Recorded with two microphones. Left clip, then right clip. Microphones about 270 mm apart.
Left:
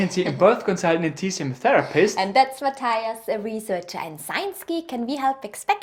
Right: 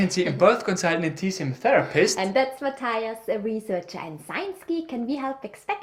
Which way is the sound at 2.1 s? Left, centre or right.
Left.